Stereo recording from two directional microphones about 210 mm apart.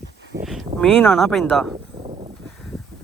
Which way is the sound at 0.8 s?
5° left (ahead or behind).